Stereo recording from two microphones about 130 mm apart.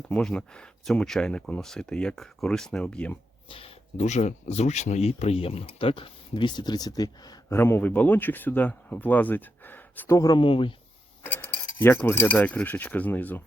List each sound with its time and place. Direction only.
0.1 s speech: 5° left (ahead or behind)
3.5 s speech: 45° left (ahead or behind); by 7.3 s 30° left (ahead or behind)
7.5 s speech: 15° left (ahead or behind)
10.2 s speech: 35° left (ahead or behind)
11.2 s cutlery: 15° left (ahead or behind)